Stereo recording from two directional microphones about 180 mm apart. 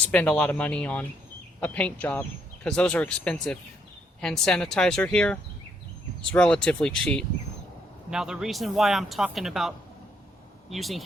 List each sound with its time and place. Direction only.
0.1 s a man's voice: 5° left (ahead or behind)